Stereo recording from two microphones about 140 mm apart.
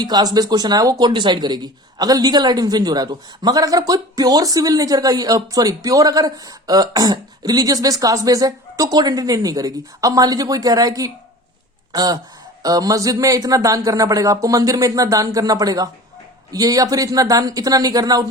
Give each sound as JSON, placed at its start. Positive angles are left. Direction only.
{"t": 0.0, "sound": "speech", "side_deg": -30}